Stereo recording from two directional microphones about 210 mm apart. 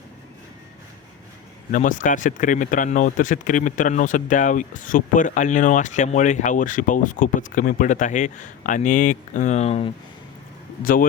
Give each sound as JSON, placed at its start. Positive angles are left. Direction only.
{"t": 1.7, "sound": "speech", "side_deg": 35}